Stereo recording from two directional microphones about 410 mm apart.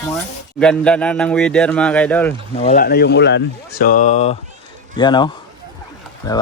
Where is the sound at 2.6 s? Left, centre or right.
Centre.